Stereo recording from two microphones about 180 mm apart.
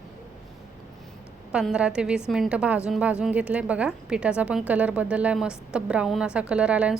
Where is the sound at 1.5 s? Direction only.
5° right (ahead or behind).